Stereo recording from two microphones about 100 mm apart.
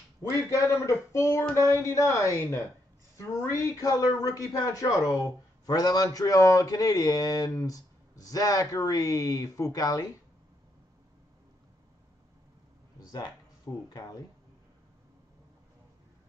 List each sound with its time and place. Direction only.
0.3 s a woman's voice: 30° left (ahead or behind)
13.8 s speech: 40° left (ahead or behind)